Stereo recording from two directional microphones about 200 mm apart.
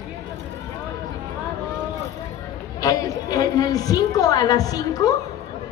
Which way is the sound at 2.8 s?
20° left (ahead or behind).